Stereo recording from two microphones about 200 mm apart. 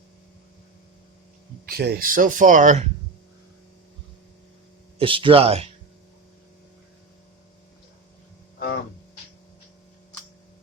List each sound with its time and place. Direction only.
1.6 s speech: 50° right (ahead or behind); by 2.9 s 35° right (ahead or behind)
4.9 s speech: 25° right (ahead or behind)